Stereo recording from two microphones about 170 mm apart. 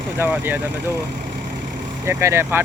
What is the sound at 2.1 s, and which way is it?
Speech, 15° right (ahead or behind).